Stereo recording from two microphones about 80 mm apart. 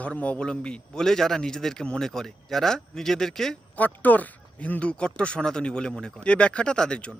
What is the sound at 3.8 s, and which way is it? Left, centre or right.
Speech, left.